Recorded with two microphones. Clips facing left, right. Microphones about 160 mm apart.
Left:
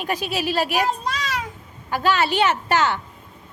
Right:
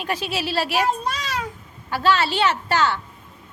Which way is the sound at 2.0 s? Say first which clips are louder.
Even; 15° left (ahead or behind).